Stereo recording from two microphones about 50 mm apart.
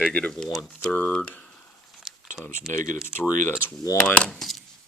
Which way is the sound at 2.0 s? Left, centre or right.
Centre.